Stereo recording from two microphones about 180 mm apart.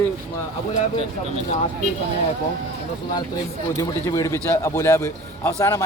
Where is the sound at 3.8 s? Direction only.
15° left (ahead or behind).